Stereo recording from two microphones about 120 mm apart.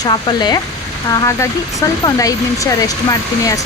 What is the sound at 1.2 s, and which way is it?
Speech, 25° left (ahead or behind).